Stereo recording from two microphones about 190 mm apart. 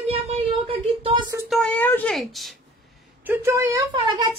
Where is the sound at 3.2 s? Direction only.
10° right (ahead or behind).